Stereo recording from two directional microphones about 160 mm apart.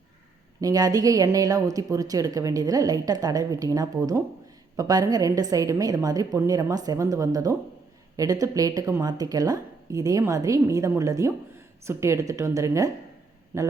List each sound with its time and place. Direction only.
0.6 s speech: 20° right (ahead or behind)